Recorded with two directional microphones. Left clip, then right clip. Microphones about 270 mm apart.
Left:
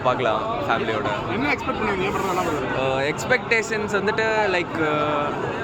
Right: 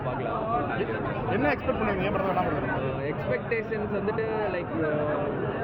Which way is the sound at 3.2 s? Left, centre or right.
Left.